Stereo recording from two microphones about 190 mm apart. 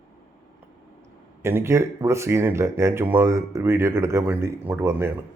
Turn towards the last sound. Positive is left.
turn(degrees=-15)  # may be behind; listen again after turning